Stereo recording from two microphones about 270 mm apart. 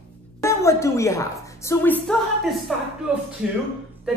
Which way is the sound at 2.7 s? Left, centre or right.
Centre.